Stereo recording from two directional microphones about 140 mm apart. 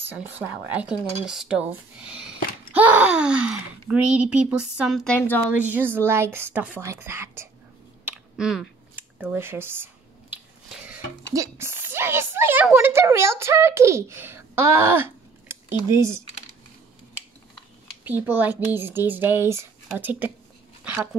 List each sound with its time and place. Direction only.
0.0 s speech: 15° right (ahead or behind); by 5.2 s 5° left (ahead or behind)
5.6 s speech: 15° right (ahead or behind)
8.0 s a sound: 5° right (ahead or behind)
11.3 s a child's voice: 20° right (ahead or behind)
18.0 s speech: 15° right (ahead or behind)
20.8 s a sound: 10° right (ahead or behind)